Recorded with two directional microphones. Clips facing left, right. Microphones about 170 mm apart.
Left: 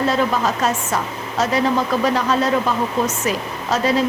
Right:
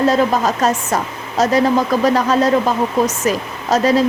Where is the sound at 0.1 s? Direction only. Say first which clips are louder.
Right 4 dB; 40° right (ahead or behind).